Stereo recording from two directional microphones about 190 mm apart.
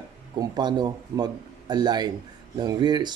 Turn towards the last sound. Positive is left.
turn(degrees=-25)  # may be behind; listen again after turning